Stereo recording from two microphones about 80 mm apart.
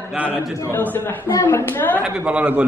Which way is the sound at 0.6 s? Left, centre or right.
Left.